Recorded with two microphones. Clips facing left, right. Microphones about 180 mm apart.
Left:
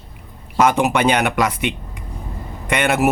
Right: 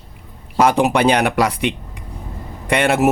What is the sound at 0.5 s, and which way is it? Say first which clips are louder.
Speech: right 1 dB; 35° right (ahead or behind).